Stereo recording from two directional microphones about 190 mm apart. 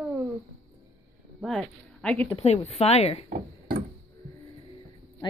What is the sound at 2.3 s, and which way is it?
Speech, 35° left (ahead or behind).